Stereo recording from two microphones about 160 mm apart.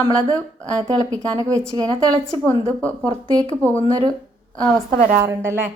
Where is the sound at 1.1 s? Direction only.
20° right (ahead or behind).